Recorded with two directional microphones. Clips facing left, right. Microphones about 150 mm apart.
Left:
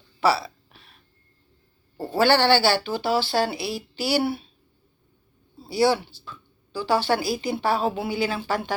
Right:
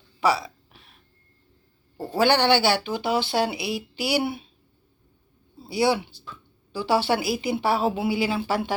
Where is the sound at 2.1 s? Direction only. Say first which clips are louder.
Left 1 dB; 15° right (ahead or behind).